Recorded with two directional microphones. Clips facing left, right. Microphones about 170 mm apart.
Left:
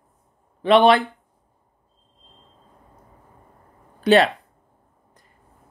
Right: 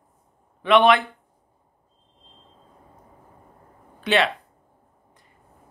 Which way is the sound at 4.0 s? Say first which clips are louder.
Left 6 dB; 40° left (ahead or behind).